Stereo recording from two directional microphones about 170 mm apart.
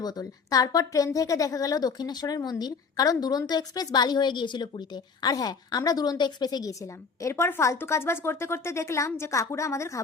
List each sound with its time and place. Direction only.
0.0 s a woman's voice: 20° left (ahead or behind)